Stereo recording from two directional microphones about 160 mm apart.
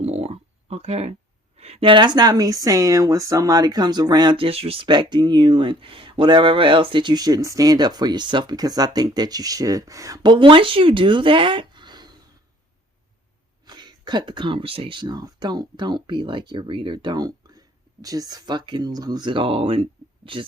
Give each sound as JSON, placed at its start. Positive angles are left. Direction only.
{"t": 0.0, "sound": "a sound", "side_deg": -40}
{"t": 1.5, "sound": "speech", "side_deg": -40}
{"t": 13.7, "sound": "speech", "side_deg": -25}